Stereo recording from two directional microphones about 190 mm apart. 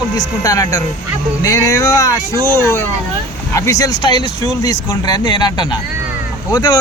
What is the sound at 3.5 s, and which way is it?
Speech, 15° left (ahead or behind).